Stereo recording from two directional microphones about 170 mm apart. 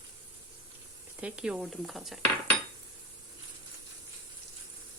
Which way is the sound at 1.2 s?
5° right (ahead or behind).